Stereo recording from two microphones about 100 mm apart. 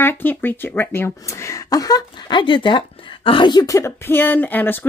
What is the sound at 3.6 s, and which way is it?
Speech, 30° left (ahead or behind).